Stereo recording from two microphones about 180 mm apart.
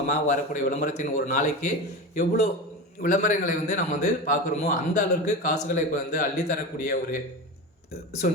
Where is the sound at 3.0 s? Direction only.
45° left (ahead or behind).